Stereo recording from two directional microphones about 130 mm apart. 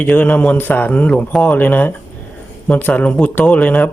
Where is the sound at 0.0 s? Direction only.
15° left (ahead or behind).